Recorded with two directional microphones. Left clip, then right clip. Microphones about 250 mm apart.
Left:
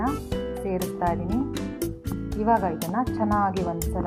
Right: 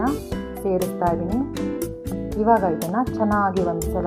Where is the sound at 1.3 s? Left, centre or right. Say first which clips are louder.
Right 3 dB; centre.